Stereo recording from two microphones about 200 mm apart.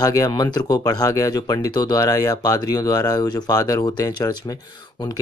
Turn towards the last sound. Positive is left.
turn(degrees=20)  # may be behind; listen again after turning